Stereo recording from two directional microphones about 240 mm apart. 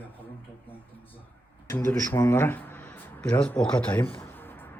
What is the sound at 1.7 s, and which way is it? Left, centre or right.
Speech, centre.